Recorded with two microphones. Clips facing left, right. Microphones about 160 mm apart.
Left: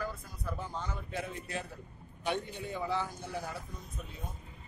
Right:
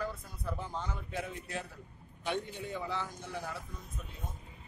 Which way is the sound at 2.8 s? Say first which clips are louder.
Left 3 dB; 10° left (ahead or behind).